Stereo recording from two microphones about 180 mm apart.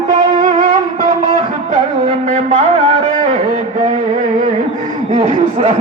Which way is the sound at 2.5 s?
30° right (ahead or behind).